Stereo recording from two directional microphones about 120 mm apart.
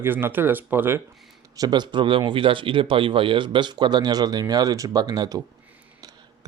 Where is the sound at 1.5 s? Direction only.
35° right (ahead or behind).